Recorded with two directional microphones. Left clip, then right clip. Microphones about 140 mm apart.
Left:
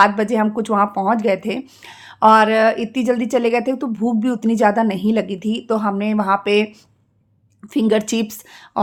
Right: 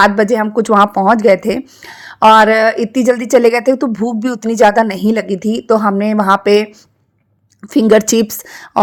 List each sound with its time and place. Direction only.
0.0 s a woman's voice: 45° right (ahead or behind)